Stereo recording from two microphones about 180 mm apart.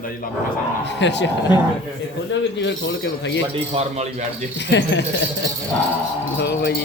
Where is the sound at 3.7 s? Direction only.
35° right (ahead or behind).